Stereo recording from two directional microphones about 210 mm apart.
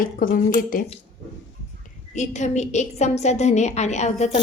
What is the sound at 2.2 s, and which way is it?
A woman's voice, 35° left (ahead or behind).